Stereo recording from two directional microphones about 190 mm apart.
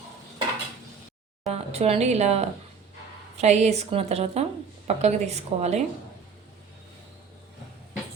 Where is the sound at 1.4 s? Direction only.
35° right (ahead or behind).